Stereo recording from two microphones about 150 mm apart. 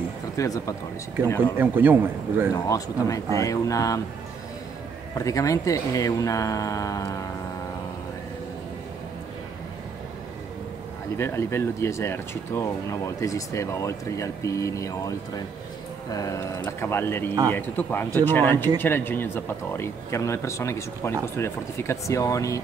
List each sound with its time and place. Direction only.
0.4 s speech: 20° left (ahead or behind)
1.6 s a man's voice: 10° right (ahead or behind)
2.5 s speech: 25° left (ahead or behind)
5.1 s speech: 20° left (ahead or behind)
11.1 s speech: 15° left (ahead or behind)